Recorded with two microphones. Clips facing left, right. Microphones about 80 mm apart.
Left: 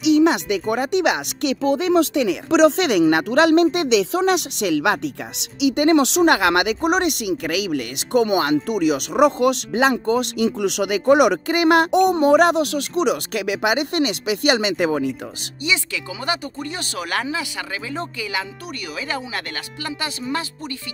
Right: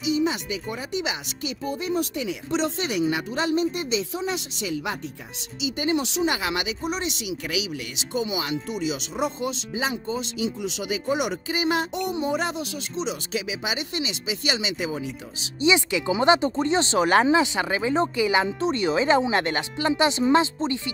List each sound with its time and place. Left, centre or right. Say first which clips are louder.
0.0 s speech: left 9 dB; left
15.6 s speech: right 4 dB; right